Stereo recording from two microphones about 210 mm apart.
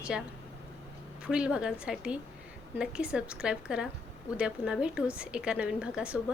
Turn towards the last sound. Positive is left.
turn(degrees=-5)  # may be behind; listen again after turning